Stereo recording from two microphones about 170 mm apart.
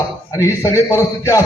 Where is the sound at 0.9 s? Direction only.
15° left (ahead or behind).